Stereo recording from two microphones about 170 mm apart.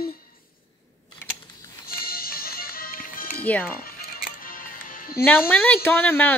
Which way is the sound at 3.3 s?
10° left (ahead or behind).